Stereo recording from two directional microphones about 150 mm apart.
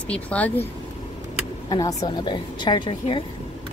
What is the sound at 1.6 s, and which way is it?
Speech, 25° left (ahead or behind).